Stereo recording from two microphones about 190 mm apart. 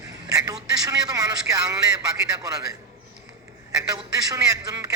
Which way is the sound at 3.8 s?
20° right (ahead or behind).